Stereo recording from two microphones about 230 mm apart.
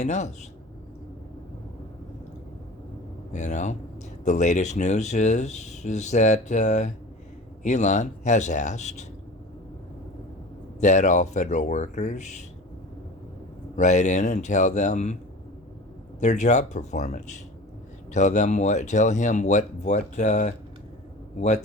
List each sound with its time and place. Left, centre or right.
0.0 s speech: left
3.3 s speech: left
10.8 s speech: left
13.7 s speech: left
16.2 s speech: left